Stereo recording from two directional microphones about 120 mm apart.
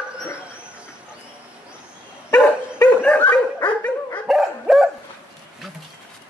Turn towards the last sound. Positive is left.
turn(degrees=-5)  # may be behind; listen again after turning